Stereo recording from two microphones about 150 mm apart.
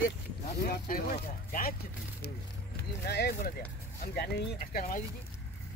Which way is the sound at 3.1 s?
90° left.